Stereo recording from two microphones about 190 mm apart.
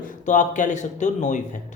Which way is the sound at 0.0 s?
45° left (ahead or behind).